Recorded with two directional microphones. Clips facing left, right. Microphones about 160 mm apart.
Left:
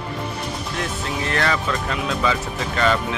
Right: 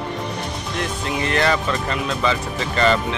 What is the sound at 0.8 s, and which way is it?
Speech, centre (ahead or behind).